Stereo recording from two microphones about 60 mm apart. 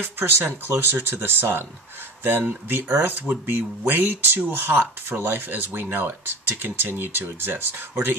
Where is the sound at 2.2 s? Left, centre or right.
Right.